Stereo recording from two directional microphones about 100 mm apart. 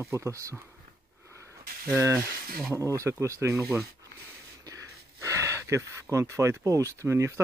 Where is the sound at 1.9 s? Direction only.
30° right (ahead or behind).